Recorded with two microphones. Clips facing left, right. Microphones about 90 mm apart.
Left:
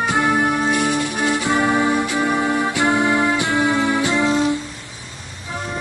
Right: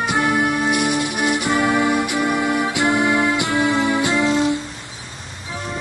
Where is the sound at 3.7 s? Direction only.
20° right (ahead or behind).